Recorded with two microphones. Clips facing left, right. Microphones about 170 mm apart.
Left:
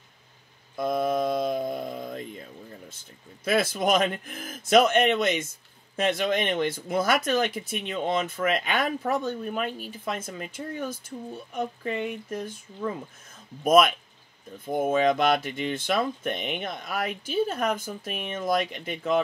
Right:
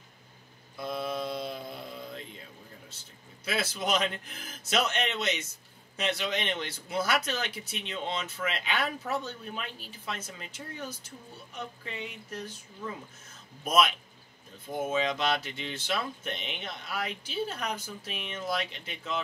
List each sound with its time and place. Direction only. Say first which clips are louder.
0.7 s mantra: left 8 dB; 50° left (ahead or behind)
3.4 s speech: left 8 dB; 50° left (ahead or behind)
13.7 s speech: left 7 dB; 50° left (ahead or behind)